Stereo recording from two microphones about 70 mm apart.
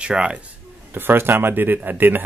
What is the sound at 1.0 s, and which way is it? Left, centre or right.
Speech, right.